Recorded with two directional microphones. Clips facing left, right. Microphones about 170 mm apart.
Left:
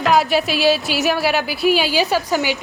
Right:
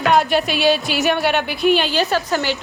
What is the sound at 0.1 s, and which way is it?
A woman's voice, centre (ahead or behind).